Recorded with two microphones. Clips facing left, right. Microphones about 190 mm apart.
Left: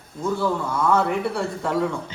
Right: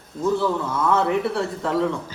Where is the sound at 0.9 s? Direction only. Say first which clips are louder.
Right 2 dB; centre (ahead or behind).